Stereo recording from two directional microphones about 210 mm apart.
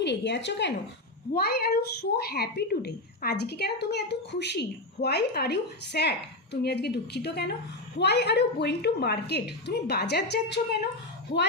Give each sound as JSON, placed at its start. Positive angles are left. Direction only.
{"t": 0.0, "sound": "a woman's voice", "side_deg": 55}